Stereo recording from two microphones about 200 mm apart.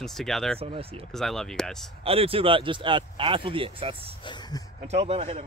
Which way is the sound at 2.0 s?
30° right (ahead or behind).